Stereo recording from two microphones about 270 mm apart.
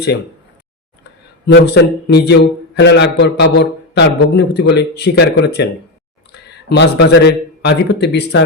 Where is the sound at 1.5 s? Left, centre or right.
Left.